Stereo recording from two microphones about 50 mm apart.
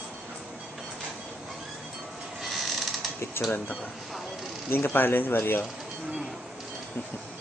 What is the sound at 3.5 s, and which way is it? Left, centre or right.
Speech, left.